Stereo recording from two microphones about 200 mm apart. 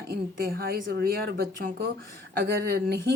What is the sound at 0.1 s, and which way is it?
Speech, 50° right (ahead or behind).